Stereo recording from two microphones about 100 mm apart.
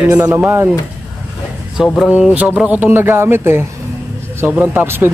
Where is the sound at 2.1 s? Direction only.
15° right (ahead or behind).